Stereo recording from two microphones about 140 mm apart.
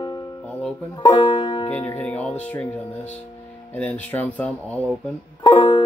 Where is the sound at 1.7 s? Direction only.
10° left (ahead or behind).